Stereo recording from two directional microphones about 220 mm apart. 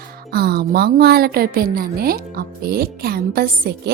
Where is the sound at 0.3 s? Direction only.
45° right (ahead or behind).